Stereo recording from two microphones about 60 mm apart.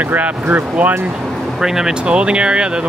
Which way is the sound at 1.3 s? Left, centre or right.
Centre.